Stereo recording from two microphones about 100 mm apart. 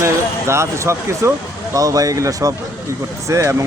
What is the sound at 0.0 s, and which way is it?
Speech, 30° right (ahead or behind).